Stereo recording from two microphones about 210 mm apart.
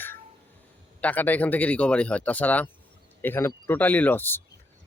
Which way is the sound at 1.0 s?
10° left (ahead or behind).